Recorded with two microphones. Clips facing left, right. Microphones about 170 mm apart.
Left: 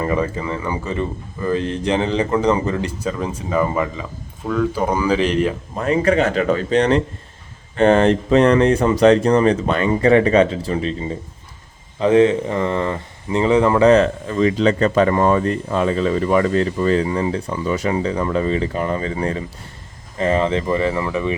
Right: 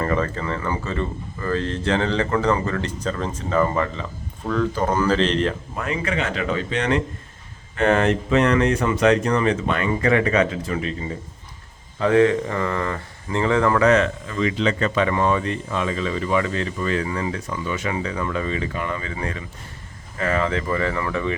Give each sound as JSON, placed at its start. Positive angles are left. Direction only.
{"t": 0.0, "sound": "speech", "side_deg": 15}
{"t": 5.7, "sound": "speech", "side_deg": 35}
{"t": 13.8, "sound": "speech", "side_deg": 35}